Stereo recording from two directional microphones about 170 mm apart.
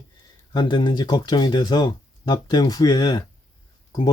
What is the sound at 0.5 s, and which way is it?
Speech, 25° left (ahead or behind).